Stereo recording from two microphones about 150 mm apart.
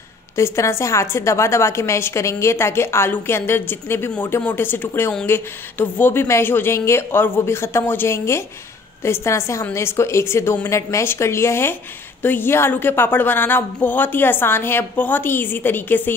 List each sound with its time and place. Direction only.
0.4 s a woman's voice: 20° left (ahead or behind)